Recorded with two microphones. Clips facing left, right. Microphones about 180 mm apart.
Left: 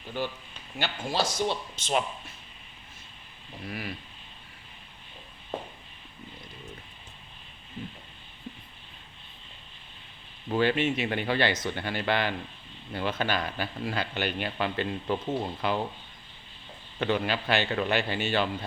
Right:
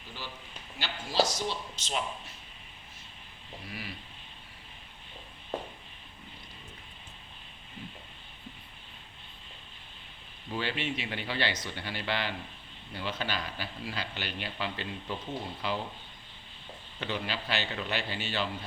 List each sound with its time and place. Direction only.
0.2 s a man's voice: 55° left (ahead or behind)
3.7 s a man's voice: 50° left (ahead or behind)
10.5 s a man's voice: 55° left (ahead or behind)
17.0 s a man's voice: 55° left (ahead or behind)